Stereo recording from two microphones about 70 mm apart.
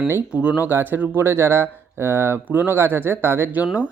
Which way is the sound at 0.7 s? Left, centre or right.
Right.